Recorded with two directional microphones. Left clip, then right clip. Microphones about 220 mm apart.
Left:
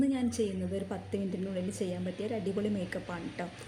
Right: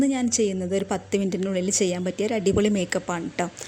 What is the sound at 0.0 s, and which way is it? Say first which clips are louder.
Speech: right 8 dB; 40° right (ahead or behind).